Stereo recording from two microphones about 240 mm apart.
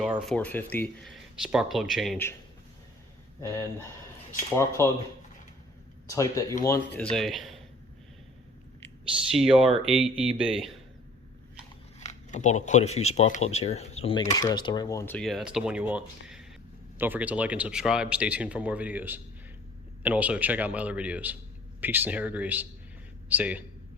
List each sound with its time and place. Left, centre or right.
0.0 s speech: centre
4.5 s speech: centre
6.1 s speech: centre
9.3 s speech: centre
11.9 s a man's voice: left; by 23.6 s centre